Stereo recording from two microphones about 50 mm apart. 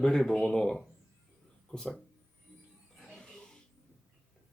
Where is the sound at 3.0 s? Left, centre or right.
Centre.